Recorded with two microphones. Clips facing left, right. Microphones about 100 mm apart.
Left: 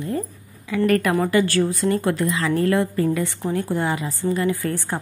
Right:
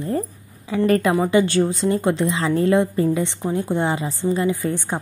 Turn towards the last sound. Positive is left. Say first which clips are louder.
# right 1 dB
turn(degrees=-20)  # may be behind; listen again after turning